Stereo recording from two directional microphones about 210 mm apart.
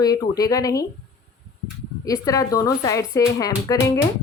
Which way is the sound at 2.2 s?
15° left (ahead or behind).